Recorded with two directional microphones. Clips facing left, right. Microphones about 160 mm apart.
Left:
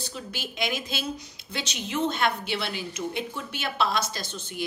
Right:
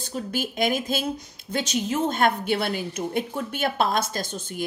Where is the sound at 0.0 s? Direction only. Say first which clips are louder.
Right 8 dB; 45° right (ahead or behind).